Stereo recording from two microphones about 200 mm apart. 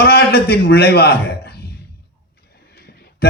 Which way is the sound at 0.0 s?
50° left (ahead or behind).